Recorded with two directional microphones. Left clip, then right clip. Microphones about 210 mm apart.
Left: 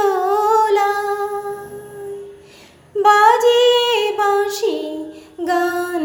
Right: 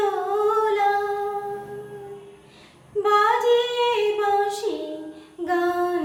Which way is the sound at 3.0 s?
35° left (ahead or behind).